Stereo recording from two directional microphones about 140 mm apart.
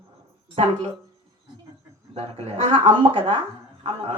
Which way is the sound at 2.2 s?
45° right (ahead or behind).